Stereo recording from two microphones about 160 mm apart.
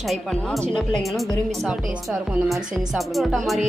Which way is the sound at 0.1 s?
Centre (ahead or behind).